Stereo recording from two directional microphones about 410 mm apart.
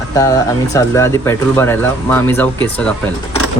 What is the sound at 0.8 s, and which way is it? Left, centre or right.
Speech, centre.